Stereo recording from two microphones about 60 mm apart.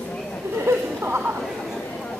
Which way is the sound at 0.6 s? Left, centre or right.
Right.